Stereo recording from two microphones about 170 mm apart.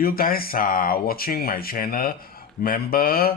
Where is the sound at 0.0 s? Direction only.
60° left (ahead or behind).